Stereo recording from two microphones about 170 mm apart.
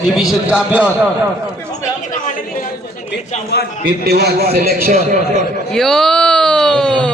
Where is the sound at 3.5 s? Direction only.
80° left.